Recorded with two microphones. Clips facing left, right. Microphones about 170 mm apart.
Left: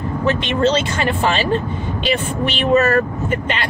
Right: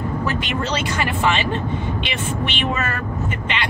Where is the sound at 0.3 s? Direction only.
25° left (ahead or behind).